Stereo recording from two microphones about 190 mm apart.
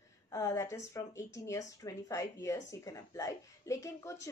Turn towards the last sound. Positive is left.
turn(degrees=15)  # may be behind; listen again after turning